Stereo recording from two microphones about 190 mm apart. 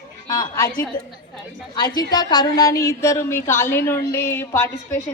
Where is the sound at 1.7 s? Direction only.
20° left (ahead or behind).